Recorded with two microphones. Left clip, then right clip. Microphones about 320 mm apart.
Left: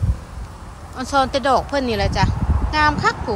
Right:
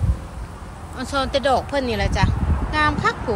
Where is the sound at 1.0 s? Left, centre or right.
Centre.